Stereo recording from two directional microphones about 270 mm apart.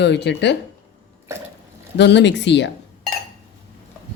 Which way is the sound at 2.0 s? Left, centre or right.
Left.